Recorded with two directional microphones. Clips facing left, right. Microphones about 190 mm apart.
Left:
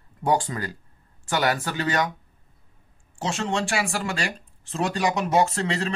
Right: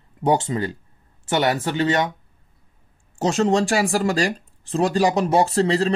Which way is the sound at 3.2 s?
40° right (ahead or behind).